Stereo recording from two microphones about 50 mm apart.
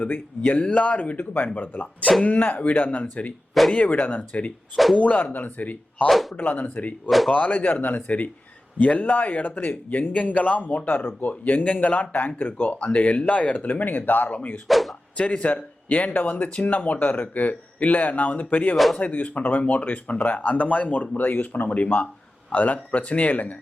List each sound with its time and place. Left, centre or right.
0.0 s speech: left
3.5 s speech: centre
3.8 s speech: left
14.7 s speech: centre
15.2 s speech: left